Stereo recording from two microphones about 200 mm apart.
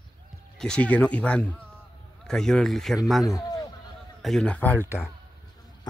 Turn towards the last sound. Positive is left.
turn(degrees=10)  # may be behind; listen again after turning